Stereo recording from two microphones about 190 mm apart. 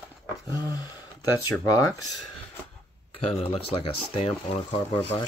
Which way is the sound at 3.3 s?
30° left (ahead or behind).